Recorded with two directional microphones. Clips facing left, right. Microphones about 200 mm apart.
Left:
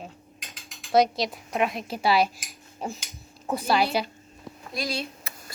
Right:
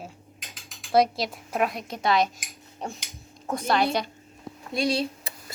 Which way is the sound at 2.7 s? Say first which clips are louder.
Left 2 dB; centre (ahead or behind).